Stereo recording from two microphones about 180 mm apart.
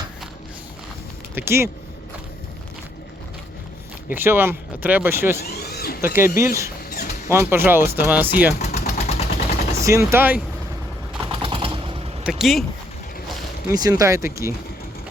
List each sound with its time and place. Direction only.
1.4 s speech: 15° right (ahead or behind)
4.1 s speech: 10° right (ahead or behind)
5.4 s a sound: 60° left (ahead or behind)
6.1 s speech: 15° right (ahead or behind)
8.5 s a sound: 40° left (ahead or behind)
9.7 s speech: 15° right (ahead or behind)
11.3 s a sound: 30° right (ahead or behind)
12.2 s speech: centre (ahead or behind)
13.7 s speech: 20° right (ahead or behind)